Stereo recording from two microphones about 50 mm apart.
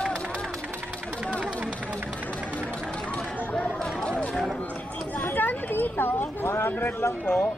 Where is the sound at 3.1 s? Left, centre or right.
Centre.